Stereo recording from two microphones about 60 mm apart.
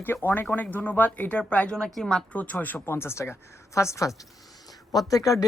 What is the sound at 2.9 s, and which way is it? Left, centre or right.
A woman's voice, left.